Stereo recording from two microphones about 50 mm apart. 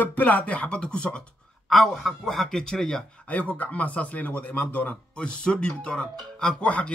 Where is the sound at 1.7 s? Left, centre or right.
Centre.